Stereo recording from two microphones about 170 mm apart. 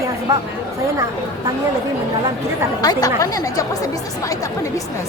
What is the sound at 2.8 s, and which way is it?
Speech, 20° left (ahead or behind).